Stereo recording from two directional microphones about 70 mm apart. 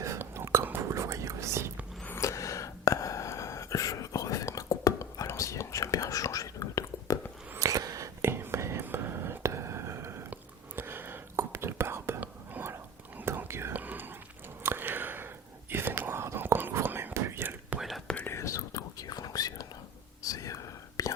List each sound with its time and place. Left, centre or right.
0.2 s whispering: right
0.9 s whispering: right
2.2 s a sound: left
7.6 s a sound: right
8.2 s whispering: right
13.7 s whispering: right
14.6 s biting: right
15.7 s whispering: right
17.7 s whispering: centre
18.3 s whispering: left
20.2 s whispering: left